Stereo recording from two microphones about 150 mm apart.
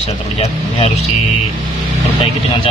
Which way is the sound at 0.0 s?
45° left (ahead or behind).